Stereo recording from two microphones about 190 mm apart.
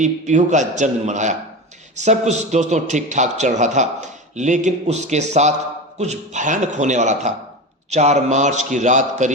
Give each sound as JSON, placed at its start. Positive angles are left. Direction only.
{"t": 0.0, "sound": "a man's voice", "side_deg": -40}